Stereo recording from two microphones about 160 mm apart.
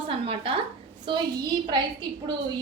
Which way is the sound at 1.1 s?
25° right (ahead or behind).